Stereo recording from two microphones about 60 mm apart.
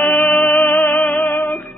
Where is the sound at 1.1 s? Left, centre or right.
Left.